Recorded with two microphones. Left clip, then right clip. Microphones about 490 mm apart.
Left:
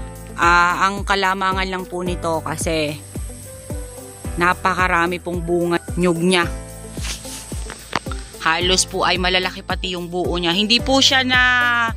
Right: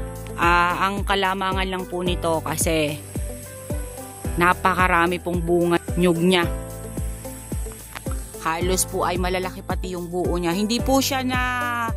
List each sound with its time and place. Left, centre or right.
0.4 s music: right
4.4 s speech: right
8.4 s speech: right